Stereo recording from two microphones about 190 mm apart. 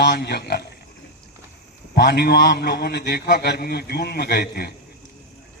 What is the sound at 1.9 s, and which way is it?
A man's voice, 60° left (ahead or behind).